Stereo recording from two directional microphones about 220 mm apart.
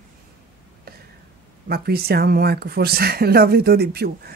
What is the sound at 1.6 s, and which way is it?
Speech, 45° right (ahead or behind).